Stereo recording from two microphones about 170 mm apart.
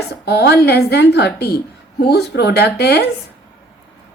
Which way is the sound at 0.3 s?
75° left (ahead or behind).